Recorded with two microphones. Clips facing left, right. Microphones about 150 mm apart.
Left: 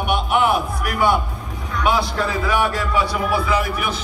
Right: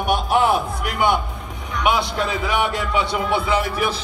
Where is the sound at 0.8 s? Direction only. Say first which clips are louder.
Left 1 dB; 20° right (ahead or behind).